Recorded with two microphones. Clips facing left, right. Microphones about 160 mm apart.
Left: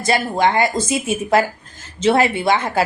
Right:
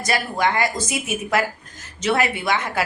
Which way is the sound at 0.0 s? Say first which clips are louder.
Left 5 dB; 25° left (ahead or behind).